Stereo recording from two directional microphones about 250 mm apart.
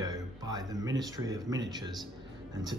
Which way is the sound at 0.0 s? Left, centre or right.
Centre.